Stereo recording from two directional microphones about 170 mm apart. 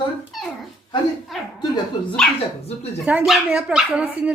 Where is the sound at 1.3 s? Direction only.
Centre (ahead or behind).